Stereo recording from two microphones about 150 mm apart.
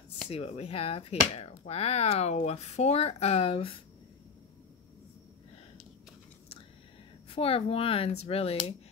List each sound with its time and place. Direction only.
0.3 s speech: 45° left (ahead or behind)
7.2 s speech: 40° left (ahead or behind)